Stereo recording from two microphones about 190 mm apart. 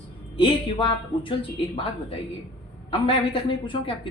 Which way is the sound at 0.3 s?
25° left (ahead or behind).